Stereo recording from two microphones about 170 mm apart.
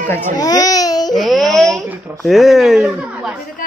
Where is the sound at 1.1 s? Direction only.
Centre (ahead or behind).